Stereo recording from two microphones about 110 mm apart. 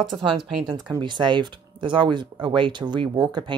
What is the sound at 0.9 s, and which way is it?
Speech, 45° right (ahead or behind).